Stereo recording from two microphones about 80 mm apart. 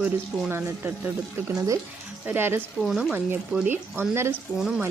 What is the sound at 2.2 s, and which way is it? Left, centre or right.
Speech, right.